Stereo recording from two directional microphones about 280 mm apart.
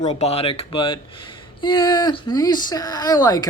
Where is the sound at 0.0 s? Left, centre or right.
Left.